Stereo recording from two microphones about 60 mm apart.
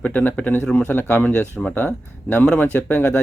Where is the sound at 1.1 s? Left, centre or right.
Left.